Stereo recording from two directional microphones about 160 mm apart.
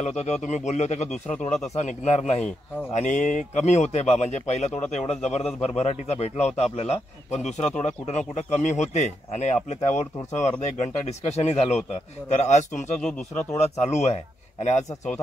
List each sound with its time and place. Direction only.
0.2 s a man's voice: 45° left (ahead or behind)